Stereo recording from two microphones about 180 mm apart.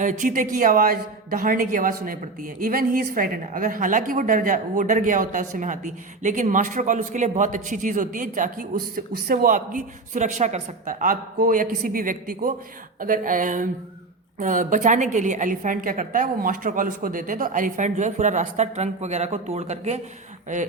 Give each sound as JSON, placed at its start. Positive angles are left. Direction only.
{"t": 0.0, "sound": "a woman's voice", "side_deg": -45}